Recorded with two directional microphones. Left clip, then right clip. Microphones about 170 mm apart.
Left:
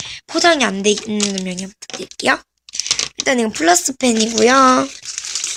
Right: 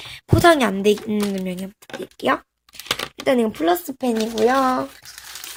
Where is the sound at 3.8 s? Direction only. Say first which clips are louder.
Left 6 dB; 20° left (ahead or behind).